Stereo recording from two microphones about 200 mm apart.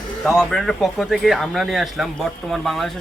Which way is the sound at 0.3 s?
Centre (ahead or behind).